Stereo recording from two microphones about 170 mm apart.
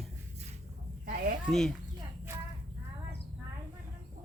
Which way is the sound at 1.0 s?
55° right (ahead or behind).